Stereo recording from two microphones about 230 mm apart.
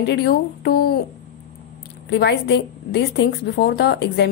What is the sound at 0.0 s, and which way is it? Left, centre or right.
A woman's voice, left.